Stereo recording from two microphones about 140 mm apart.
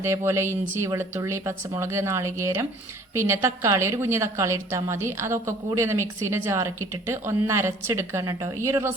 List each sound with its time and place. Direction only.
0.0 s a woman's voice: 20° right (ahead or behind)